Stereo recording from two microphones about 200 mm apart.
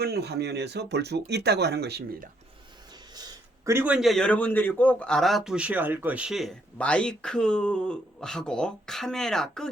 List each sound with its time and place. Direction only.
0.0 s speech: 55° right (ahead or behind)
3.2 s a man's voice: 15° right (ahead or behind); by 9.6 s centre (ahead or behind)